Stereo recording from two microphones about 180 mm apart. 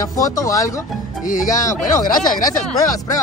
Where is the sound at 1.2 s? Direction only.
45° left (ahead or behind).